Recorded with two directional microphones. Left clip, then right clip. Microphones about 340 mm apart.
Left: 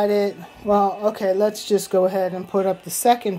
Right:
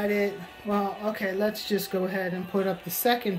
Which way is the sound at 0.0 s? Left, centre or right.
Left.